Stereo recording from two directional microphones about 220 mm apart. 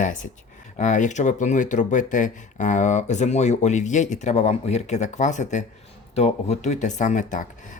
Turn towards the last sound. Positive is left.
turn(degrees=35)  # may be behind; listen again after turning